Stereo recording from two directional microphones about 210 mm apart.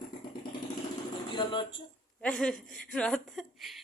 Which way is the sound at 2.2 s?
5° left (ahead or behind).